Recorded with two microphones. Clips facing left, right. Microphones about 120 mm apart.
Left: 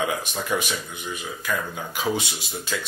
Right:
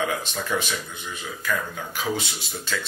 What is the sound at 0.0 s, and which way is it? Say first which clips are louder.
Speech: even; 15° left (ahead or behind).